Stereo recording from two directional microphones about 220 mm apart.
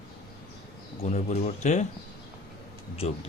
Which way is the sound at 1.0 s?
35° left (ahead or behind).